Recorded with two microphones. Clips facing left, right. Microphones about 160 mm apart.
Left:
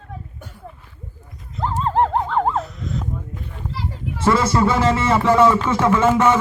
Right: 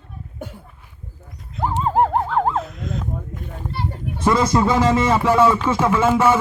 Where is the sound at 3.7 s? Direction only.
90° left.